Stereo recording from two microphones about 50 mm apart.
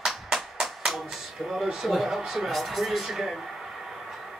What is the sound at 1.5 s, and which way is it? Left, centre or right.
Speech, centre.